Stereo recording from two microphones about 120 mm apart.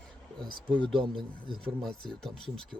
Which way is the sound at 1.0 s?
45° right (ahead or behind).